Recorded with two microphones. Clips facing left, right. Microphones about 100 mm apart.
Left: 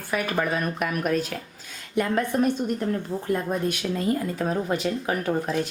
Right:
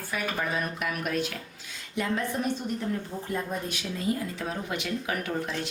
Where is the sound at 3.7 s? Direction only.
50° left (ahead or behind).